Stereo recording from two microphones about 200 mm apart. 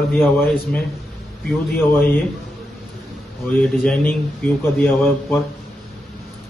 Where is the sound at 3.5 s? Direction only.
10° left (ahead or behind).